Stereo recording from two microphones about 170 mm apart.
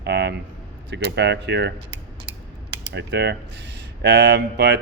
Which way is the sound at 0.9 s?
90° right.